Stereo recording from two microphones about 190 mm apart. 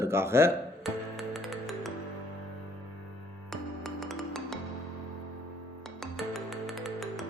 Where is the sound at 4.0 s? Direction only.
Centre (ahead or behind).